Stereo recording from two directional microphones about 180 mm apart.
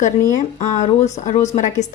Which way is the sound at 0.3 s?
40° left (ahead or behind).